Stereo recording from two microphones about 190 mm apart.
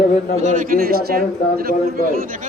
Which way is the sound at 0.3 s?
40° right (ahead or behind).